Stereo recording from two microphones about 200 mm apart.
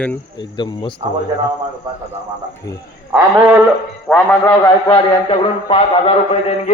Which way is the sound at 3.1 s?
10° right (ahead or behind).